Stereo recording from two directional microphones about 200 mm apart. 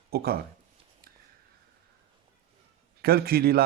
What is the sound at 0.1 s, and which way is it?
Speech, 50° right (ahead or behind).